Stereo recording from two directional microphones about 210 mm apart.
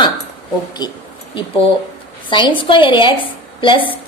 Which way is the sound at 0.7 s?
20° left (ahead or behind).